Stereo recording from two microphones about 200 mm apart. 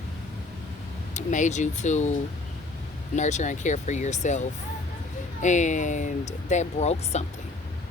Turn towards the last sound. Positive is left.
turn(degrees=35)  # may be behind; listen again after turning